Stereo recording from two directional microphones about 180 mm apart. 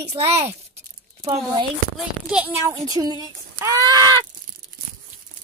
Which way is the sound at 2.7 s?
20° right (ahead or behind).